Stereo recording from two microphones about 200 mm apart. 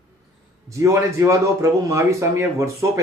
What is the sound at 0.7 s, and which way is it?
Speech, 15° right (ahead or behind).